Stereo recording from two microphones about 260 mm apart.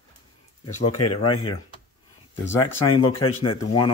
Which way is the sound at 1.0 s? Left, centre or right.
Left.